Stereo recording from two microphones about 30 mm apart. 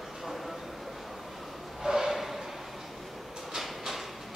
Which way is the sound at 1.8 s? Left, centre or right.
Centre.